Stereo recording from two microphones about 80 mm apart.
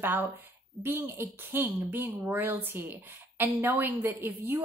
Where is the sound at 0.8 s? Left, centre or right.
Right.